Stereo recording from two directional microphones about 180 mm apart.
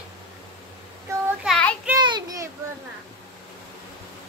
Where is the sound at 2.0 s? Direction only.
25° right (ahead or behind).